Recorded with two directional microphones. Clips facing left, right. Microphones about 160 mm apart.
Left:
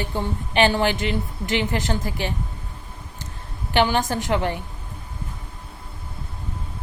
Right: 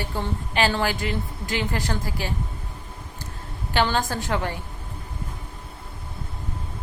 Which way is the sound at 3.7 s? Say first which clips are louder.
Left 3 dB; 20° left (ahead or behind).